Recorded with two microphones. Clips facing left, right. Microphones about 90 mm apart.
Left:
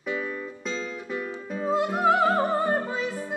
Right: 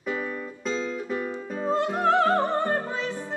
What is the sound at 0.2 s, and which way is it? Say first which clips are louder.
Music: even; 5° right (ahead or behind).